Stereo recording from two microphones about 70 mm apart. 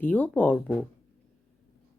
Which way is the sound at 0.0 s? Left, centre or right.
Left.